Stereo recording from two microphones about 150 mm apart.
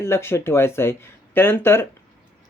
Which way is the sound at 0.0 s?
15° left (ahead or behind).